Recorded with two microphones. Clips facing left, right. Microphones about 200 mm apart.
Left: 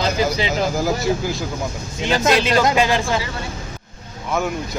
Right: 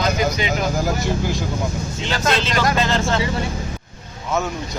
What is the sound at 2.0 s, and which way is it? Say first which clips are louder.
Speech: left 5 dB; 15° left (ahead or behind).